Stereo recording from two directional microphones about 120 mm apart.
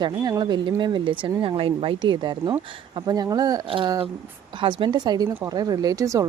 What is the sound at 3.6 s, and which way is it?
Speech, 45° right (ahead or behind).